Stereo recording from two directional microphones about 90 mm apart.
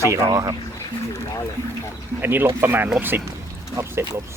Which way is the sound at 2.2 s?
20° right (ahead or behind).